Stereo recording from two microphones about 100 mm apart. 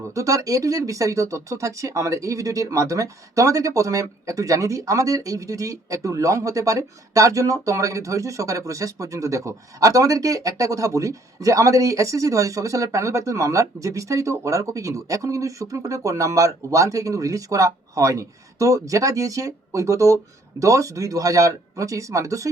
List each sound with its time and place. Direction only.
0.1 s speech: 35° right (ahead or behind)